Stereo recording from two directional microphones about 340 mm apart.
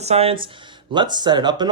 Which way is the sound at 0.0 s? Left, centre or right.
Centre.